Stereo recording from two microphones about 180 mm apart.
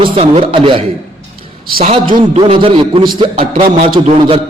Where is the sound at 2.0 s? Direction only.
50° right (ahead or behind).